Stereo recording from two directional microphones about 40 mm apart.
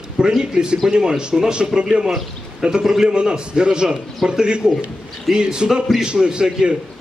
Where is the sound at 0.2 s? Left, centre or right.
Centre.